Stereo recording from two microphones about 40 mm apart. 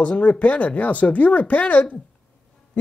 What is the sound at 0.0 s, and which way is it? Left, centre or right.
Speech, left.